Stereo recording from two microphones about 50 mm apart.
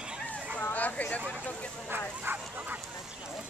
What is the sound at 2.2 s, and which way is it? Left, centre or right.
Bow-wow, right.